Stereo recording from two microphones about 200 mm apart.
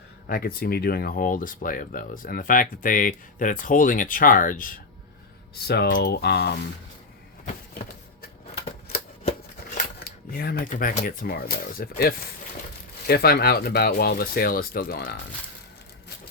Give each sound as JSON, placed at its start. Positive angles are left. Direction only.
{"t": 0.3, "sound": "speech", "side_deg": 45}
{"t": 9.7, "sound": "speech", "side_deg": 45}